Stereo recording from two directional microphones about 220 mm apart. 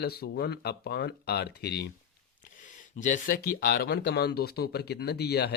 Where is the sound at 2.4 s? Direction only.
35° left (ahead or behind).